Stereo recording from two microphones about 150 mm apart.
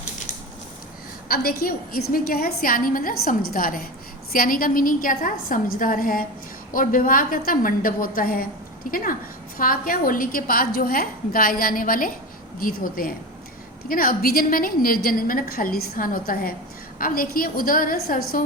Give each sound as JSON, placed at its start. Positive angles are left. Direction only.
{"t": 1.3, "sound": "a woman's voice", "side_deg": 80}